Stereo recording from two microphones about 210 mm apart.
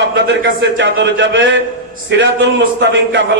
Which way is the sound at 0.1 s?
60° right (ahead or behind).